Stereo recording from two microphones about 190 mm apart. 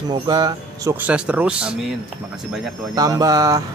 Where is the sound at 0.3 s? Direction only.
20° right (ahead or behind).